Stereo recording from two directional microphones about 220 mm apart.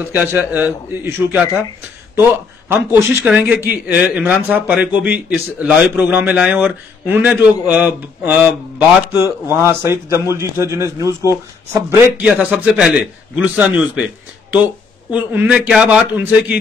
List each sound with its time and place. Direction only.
0.0 s a man's voice: 5° right (ahead or behind)
2.7 s a man's voice: 10° right (ahead or behind)